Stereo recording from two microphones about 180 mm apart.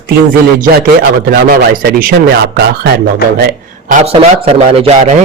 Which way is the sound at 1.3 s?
55° right (ahead or behind).